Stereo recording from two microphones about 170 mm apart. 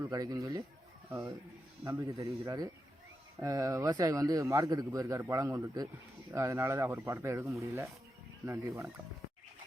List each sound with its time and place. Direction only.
0.0 s a man's voice: 20° right (ahead or behind)
1.8 s a man's voice: 15° right (ahead or behind)